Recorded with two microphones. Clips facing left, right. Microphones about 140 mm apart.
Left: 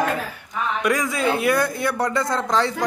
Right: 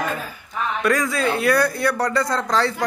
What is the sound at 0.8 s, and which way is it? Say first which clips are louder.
Speech: right 1 dB; 20° left (ahead or behind).